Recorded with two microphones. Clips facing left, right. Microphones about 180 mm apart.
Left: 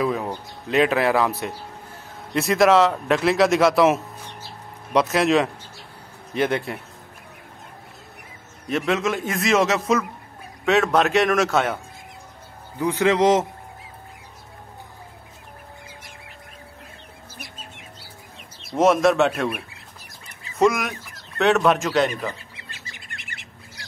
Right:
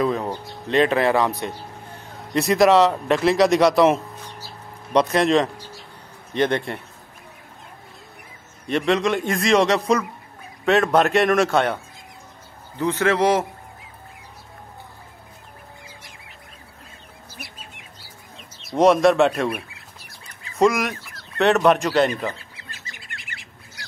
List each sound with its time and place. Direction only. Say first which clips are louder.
0.0 s speech: right 1 dB; 5° left (ahead or behind)
8.6 s speech: right 2 dB; centre (ahead or behind)
12.7 s a man's voice: left 1 dB; 15° left (ahead or behind)
18.7 s speech: right 2 dB; centre (ahead or behind)